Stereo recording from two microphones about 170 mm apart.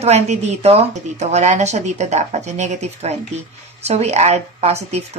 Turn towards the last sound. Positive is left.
turn(degrees=-40)  # may be behind; listen again after turning